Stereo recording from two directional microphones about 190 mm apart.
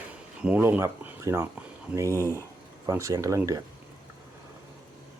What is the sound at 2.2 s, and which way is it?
Speech, 15° left (ahead or behind).